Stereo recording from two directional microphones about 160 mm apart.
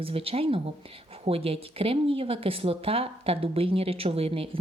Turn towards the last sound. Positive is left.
turn(degrees=-35)  # may be behind; listen again after turning